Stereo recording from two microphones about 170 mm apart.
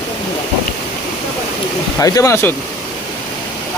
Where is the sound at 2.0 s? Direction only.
20° left (ahead or behind).